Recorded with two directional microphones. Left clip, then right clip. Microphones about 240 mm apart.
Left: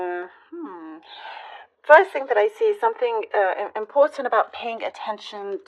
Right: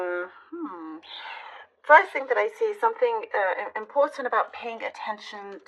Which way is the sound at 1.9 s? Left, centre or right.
Left.